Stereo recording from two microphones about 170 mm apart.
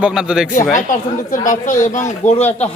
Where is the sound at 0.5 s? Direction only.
50° left (ahead or behind).